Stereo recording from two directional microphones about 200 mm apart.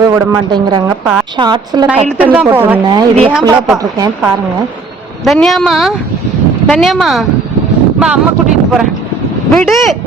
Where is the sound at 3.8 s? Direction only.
20° right (ahead or behind).